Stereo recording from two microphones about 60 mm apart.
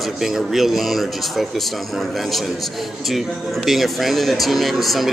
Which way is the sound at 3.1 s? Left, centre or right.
Centre.